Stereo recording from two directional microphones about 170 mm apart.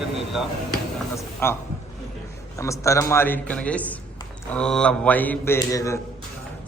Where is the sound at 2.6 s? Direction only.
15° left (ahead or behind).